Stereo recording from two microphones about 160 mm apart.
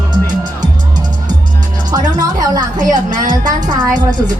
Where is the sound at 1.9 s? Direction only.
20° right (ahead or behind).